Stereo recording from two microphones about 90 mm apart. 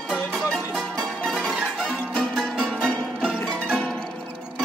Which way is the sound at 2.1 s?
10° left (ahead or behind).